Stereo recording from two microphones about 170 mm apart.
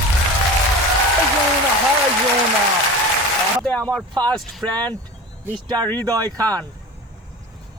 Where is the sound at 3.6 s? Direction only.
5° left (ahead or behind).